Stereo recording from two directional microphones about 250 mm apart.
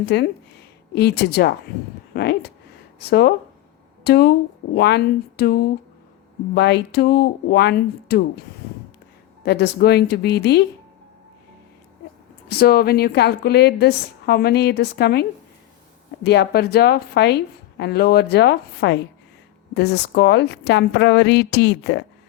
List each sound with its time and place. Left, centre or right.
0.0 s a woman's voice: left
9.4 s a woman's voice: left
12.5 s a woman's voice: left